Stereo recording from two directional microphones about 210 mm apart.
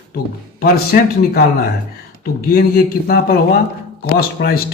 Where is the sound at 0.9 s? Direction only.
45° left (ahead or behind).